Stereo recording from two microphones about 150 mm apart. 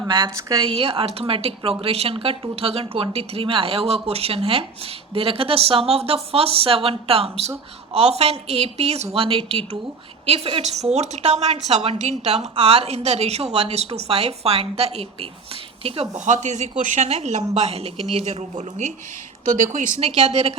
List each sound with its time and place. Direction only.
0.3 s a woman's voice: 25° right (ahead or behind)
0.6 s a woman's voice: 40° right (ahead or behind)